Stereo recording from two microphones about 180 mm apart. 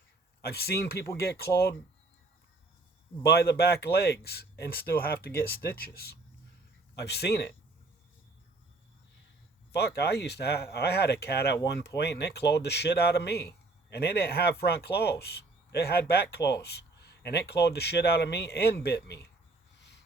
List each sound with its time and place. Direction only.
0.4 s speech: 60° left (ahead or behind)
3.2 s speech: 65° left (ahead or behind)
9.7 s speech: 65° left (ahead or behind)